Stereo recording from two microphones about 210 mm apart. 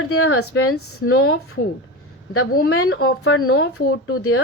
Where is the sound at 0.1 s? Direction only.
90° left.